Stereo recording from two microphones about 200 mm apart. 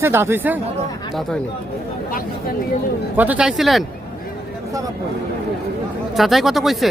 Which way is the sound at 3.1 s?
10° right (ahead or behind).